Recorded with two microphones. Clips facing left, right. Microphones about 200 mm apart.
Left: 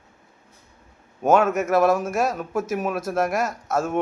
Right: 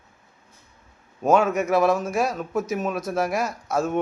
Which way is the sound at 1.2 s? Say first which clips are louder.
Left 1 dB; 5° left (ahead or behind).